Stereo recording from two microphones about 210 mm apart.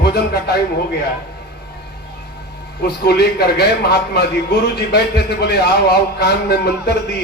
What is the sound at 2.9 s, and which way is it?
A man's voice, 50° left (ahead or behind).